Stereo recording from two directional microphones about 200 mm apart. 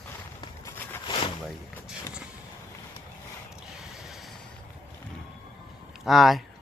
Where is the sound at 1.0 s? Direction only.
25° left (ahead or behind).